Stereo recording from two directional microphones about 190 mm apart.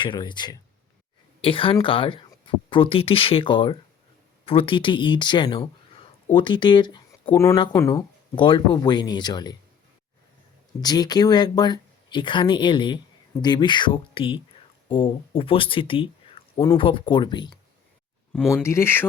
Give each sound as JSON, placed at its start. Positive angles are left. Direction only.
{"t": 0.0, "sound": "speech", "side_deg": 25}
{"t": 10.8, "sound": "speech", "side_deg": 20}
{"t": 18.5, "sound": "speech", "side_deg": 15}